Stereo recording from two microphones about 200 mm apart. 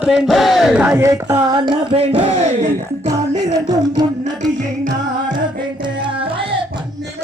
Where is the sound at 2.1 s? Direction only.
30° right (ahead or behind).